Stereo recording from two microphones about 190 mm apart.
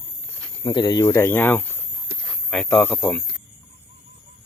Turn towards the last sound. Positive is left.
turn(degrees=10)  # may be behind; listen again after turning